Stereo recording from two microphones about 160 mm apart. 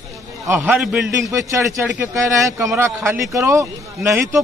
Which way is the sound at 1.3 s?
15° right (ahead or behind).